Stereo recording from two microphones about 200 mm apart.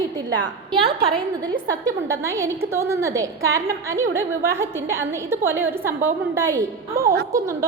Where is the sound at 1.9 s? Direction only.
15° right (ahead or behind).